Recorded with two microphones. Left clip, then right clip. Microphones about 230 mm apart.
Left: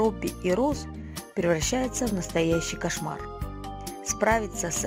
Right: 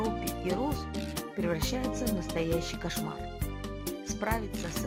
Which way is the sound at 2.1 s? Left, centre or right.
Left.